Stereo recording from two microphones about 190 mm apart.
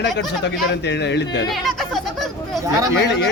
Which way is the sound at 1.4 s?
Centre (ahead or behind).